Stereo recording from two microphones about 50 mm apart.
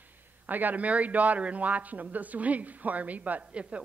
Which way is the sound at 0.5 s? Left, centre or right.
Right.